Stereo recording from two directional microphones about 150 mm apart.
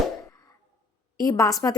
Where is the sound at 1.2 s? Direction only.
20° left (ahead or behind).